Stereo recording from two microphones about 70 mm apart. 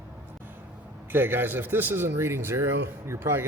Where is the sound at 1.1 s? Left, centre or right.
Right.